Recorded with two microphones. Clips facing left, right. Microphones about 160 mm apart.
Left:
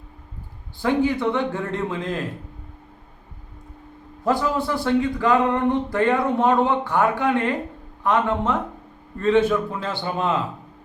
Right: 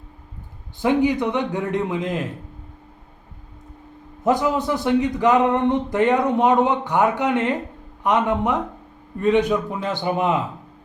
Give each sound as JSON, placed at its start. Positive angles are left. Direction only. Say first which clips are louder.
{"t": 0.8, "sound": "a man's voice", "louder": "right 2 dB", "side_deg": -20}
{"t": 4.2, "sound": "a man's voice", "louder": "right 2 dB", "side_deg": -20}